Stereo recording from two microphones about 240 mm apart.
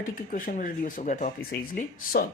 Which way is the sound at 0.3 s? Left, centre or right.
Left.